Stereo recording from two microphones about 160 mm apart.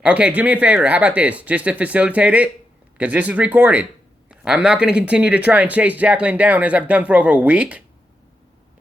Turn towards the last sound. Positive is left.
turn(degrees=-10)  # may be behind; listen again after turning